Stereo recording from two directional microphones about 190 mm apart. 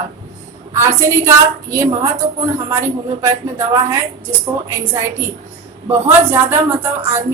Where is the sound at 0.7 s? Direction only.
15° right (ahead or behind).